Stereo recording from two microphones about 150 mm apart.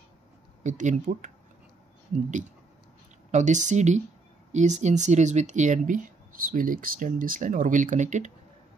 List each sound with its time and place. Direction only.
0.7 s speech: 55° right (ahead or behind)
3.3 s speech: 55° right (ahead or behind)